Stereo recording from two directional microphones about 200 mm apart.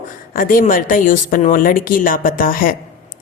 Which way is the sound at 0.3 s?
45° left (ahead or behind).